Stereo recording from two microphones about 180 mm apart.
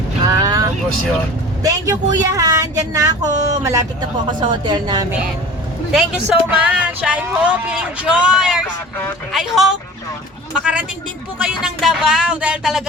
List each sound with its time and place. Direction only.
0.3 s vehicle: 20° right (ahead or behind)
1.6 s speech: 20° right (ahead or behind)
5.9 s speech: 5° right (ahead or behind)